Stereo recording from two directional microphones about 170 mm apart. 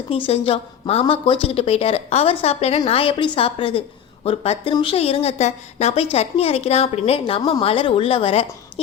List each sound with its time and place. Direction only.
0.1 s a woman's voice: 35° left (ahead or behind)